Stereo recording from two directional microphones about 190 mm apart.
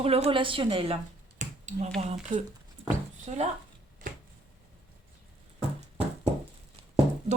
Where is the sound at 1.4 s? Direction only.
40° right (ahead or behind).